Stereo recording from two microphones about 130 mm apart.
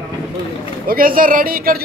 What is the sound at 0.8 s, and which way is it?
Speech, 90° right.